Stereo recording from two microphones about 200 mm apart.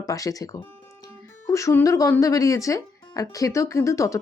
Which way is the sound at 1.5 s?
15° left (ahead or behind).